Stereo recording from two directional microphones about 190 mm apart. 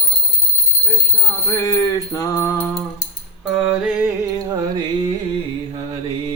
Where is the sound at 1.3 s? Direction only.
15° left (ahead or behind).